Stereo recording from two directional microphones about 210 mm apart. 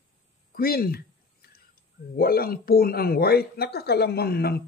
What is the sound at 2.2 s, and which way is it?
Speech, 45° left (ahead or behind).